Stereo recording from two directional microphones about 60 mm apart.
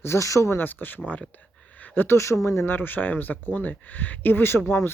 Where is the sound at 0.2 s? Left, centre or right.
Left.